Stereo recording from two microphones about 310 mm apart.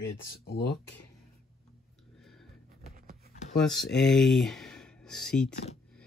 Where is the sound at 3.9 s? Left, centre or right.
Centre.